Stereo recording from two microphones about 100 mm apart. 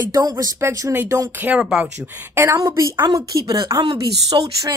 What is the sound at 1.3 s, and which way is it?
Speech, 15° right (ahead or behind).